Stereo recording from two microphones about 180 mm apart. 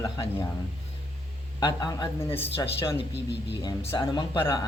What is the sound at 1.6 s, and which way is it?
Speech, 25° left (ahead or behind).